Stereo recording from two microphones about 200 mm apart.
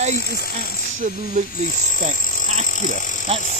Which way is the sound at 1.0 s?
40° right (ahead or behind).